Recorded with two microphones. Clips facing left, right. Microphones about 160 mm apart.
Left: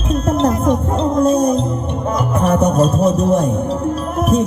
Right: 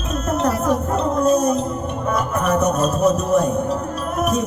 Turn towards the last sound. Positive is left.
turn(degrees=30)  # may be behind; listen again after turning